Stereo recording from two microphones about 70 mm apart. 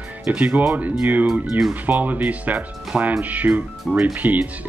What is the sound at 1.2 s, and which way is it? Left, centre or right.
Speech, centre.